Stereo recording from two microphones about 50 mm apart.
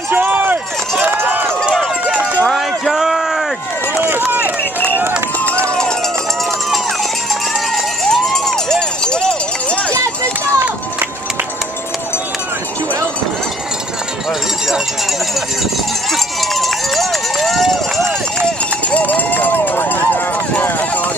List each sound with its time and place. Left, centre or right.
0.1 s run: right
2.4 s a sound: centre
4.0 s run: right
7.7 s run: centre
9.9 s run: right
16.1 s run: centre
18.9 s run: left